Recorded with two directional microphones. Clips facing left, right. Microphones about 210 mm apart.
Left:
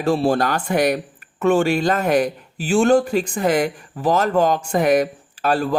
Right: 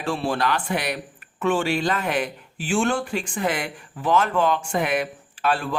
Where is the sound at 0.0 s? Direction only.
40° left (ahead or behind).